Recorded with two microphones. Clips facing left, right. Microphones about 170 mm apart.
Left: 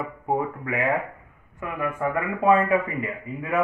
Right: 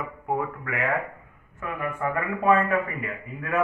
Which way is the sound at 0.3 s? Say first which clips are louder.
Left 3 dB; 20° left (ahead or behind).